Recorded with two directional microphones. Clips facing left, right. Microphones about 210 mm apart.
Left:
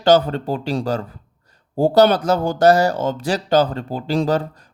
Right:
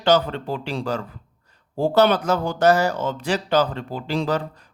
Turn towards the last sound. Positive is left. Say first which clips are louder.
# left 4 dB
turn(degrees=40)  # may be behind; listen again after turning